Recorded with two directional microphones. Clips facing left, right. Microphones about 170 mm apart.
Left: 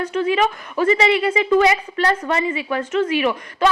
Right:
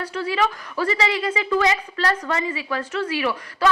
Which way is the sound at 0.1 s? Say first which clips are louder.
Left 3 dB; 20° left (ahead or behind).